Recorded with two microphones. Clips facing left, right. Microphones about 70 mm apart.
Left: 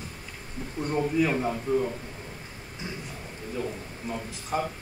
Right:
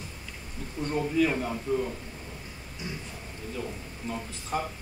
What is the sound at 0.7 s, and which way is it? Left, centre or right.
A man's voice, centre.